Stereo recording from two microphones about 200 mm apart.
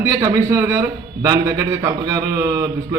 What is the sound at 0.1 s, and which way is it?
A man's voice, 15° right (ahead or behind).